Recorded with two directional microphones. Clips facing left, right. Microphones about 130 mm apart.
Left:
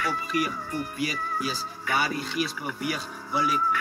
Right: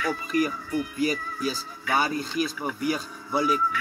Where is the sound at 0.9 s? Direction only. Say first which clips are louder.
Right 3 dB; 45° right (ahead or behind).